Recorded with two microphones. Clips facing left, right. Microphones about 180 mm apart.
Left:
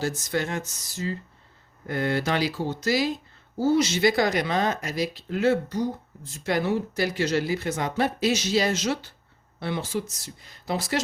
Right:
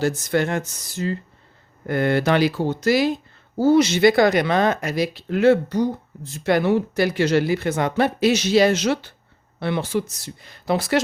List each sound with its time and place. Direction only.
0.0 s speech: 60° right (ahead or behind)